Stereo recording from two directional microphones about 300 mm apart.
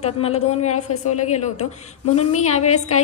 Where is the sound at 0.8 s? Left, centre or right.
Left.